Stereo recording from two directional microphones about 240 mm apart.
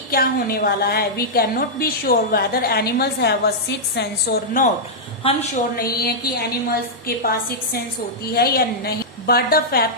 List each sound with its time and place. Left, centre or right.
0.1 s a woman's voice: left
5.7 s a woman's voice: left